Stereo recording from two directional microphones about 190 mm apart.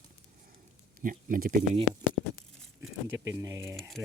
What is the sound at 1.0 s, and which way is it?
Speech, 45° right (ahead or behind).